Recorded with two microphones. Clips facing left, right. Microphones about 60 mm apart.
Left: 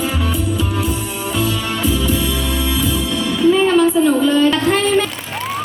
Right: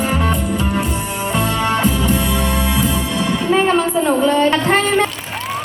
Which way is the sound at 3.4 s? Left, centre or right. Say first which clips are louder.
Left 4 dB; right.